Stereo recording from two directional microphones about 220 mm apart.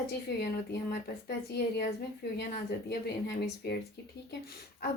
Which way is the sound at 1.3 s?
50° left (ahead or behind).